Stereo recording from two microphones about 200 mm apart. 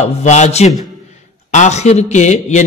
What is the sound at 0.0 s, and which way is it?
A man's voice, 35° left (ahead or behind).